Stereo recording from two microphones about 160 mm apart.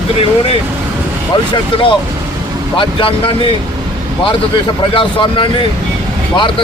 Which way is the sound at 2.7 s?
35° left (ahead or behind).